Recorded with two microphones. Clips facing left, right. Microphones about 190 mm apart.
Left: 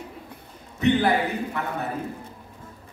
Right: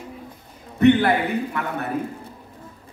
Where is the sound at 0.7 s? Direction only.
60° right (ahead or behind).